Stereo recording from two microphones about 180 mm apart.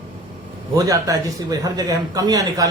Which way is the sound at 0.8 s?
20° right (ahead or behind).